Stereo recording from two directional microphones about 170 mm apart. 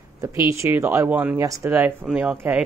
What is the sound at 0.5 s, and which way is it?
Speech, 15° right (ahead or behind).